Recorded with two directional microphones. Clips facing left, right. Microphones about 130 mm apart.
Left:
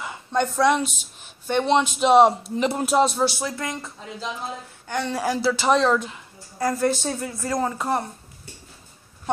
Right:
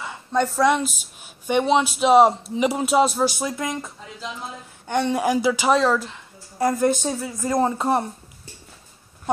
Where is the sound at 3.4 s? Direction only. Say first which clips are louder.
Right 2 dB; 15° right (ahead or behind).